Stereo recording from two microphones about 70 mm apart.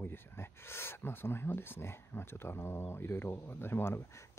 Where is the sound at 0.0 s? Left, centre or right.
Left.